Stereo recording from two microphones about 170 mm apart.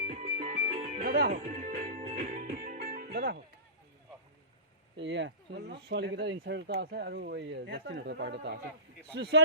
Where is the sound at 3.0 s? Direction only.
65° right (ahead or behind).